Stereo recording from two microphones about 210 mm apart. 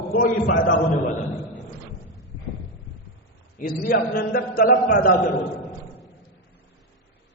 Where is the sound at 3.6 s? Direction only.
40° left (ahead or behind).